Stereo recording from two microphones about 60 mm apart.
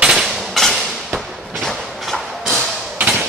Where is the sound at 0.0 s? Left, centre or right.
Centre.